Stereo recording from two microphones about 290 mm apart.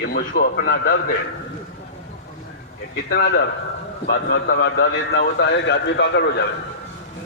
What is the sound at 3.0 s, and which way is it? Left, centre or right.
A man's voice, left.